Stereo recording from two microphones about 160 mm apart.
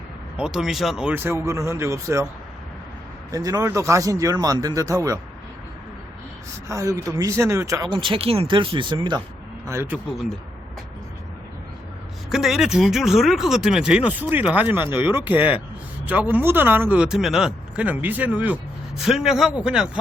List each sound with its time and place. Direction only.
0.3 s speech: 5° right (ahead or behind)
3.3 s speech: 20° right (ahead or behind)
6.7 s speech: 20° right (ahead or behind)
9.6 s speech: 15° right (ahead or behind)
12.3 s speech: centre (ahead or behind)